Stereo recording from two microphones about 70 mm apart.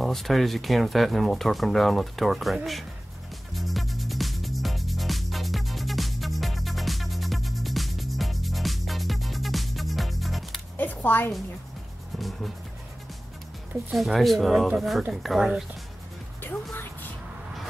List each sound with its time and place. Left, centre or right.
0.0 s speech: centre
3.5 s music: centre
10.8 s a sound: left
12.2 s music: centre
13.9 s speech: centre